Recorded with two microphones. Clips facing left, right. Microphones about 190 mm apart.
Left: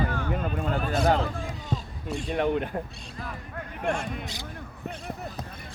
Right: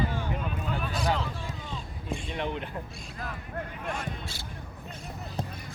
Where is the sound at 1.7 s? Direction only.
45° left (ahead or behind).